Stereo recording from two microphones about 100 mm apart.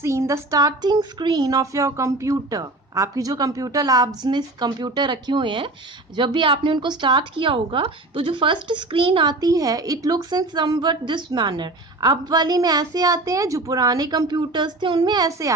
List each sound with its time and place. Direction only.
0.0 s a woman's voice: 30° right (ahead or behind); by 9.4 s 55° right (ahead or behind)
9.4 s a woman's voice: 35° right (ahead or behind)